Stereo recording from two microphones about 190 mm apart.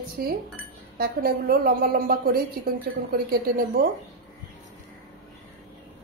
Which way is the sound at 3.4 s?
50° right (ahead or behind).